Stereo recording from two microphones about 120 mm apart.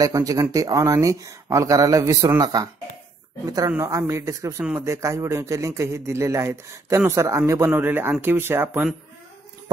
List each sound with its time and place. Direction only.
0.0 s a man's voice: 30° right (ahead or behind)